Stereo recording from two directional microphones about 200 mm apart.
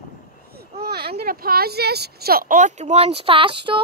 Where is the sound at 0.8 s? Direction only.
50° right (ahead or behind).